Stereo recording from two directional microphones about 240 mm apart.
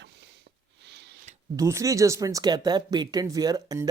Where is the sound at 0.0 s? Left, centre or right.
Right.